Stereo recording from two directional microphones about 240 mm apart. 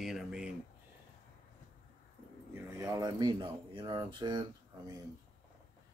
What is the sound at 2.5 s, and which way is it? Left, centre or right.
Speech, centre.